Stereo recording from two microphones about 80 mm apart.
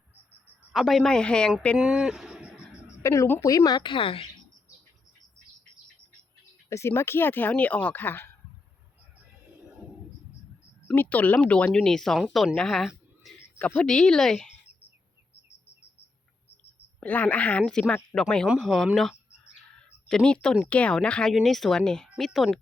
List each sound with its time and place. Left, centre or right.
0.7 s speech: centre
1.8 s speech: centre
2.6 s a sound: left
3.4 s speech: left
3.8 s a woman's voice: left
6.7 s speech: left
10.9 s speech: left; by 12.9 s centre
13.6 s speech: left
13.8 s speech: centre
17.0 s speech: left; by 18.9 s centre
20.1 s speech: centre